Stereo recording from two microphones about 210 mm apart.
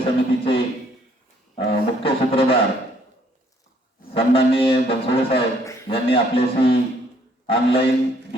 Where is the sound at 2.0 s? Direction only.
25° left (ahead or behind).